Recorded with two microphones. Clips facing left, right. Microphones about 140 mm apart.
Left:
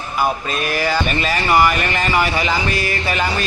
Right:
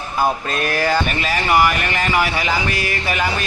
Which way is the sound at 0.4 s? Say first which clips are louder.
Right 1 dB; 15° left (ahead or behind).